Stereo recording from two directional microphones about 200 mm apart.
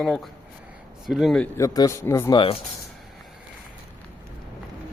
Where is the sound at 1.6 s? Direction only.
15° left (ahead or behind).